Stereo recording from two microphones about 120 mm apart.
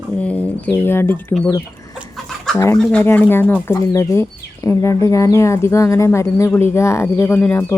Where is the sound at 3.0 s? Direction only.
20° left (ahead or behind).